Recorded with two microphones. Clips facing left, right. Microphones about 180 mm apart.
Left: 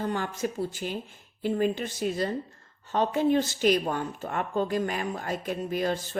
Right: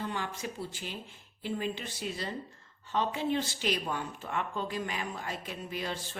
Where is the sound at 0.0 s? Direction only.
45° left (ahead or behind).